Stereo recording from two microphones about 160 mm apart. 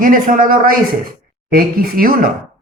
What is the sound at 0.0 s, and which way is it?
Speech, 60° right (ahead or behind).